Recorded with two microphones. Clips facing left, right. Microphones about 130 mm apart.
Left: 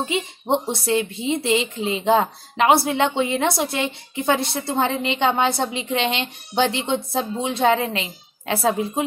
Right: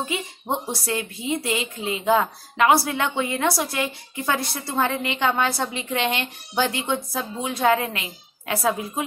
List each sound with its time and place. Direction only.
0.0 s a woman's voice: 25° left (ahead or behind)